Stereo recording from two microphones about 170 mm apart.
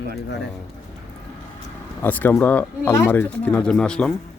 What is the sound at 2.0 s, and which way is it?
Speech, 10° left (ahead or behind).